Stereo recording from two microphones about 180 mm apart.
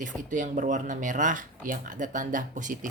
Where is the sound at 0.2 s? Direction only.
45° right (ahead or behind).